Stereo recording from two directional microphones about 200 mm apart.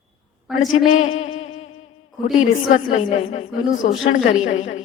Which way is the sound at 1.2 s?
35° left (ahead or behind).